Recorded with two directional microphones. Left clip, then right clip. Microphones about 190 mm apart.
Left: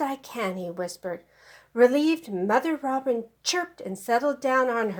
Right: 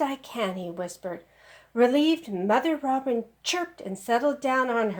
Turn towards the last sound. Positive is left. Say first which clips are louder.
# left 1 dB
turn(degrees=40)  # may be behind; listen again after turning